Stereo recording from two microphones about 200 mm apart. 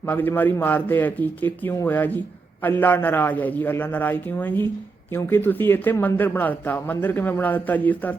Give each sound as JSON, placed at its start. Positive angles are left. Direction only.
{"t": 0.0, "sound": "a man's voice", "side_deg": 10}